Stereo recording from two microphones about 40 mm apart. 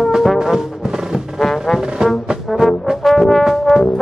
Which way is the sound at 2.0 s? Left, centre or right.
Centre.